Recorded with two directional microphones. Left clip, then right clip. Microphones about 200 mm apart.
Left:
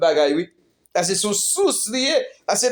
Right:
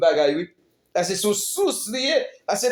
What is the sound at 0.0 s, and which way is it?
Speech, 45° left (ahead or behind).